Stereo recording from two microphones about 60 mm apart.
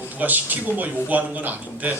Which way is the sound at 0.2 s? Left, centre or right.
Right.